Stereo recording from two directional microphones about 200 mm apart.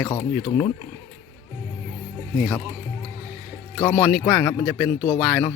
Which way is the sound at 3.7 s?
10° left (ahead or behind).